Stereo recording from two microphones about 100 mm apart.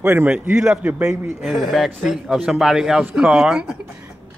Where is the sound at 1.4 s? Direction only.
Centre (ahead or behind).